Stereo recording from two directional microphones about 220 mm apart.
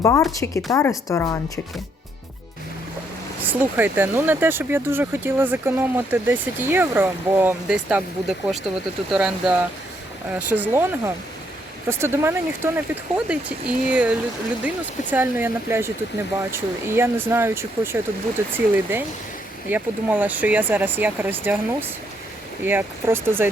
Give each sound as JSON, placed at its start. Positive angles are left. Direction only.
{"t": 0.0, "sound": "a woman's voice", "side_deg": 15}
{"t": 3.4, "sound": "speech", "side_deg": -10}